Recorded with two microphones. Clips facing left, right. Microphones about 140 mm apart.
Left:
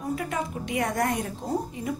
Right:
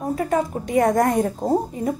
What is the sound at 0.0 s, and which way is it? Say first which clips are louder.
A woman's voice: right 8 dB; 40° right (ahead or behind).